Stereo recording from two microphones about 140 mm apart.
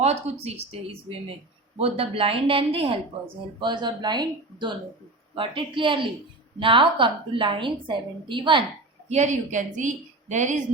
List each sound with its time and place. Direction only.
0.0 s a woman's voice: 50° right (ahead or behind)
9.1 s a woman's voice: 60° right (ahead or behind)